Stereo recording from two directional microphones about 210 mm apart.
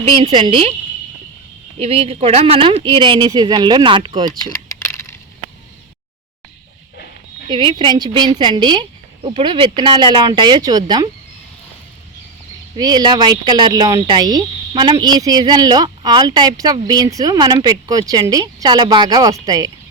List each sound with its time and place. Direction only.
0.0 s speech: 25° right (ahead or behind)
1.8 s speech: 30° right (ahead or behind)
4.7 s a sound: 15° left (ahead or behind)
7.4 s a woman's voice: 25° right (ahead or behind)
12.7 s speech: 20° right (ahead or behind)